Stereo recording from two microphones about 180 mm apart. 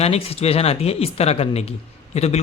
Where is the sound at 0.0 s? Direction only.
35° left (ahead or behind).